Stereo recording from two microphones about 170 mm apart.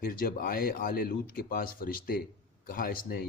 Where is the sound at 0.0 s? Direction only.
60° left (ahead or behind).